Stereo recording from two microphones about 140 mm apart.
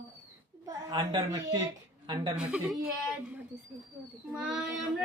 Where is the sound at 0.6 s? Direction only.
30° right (ahead or behind).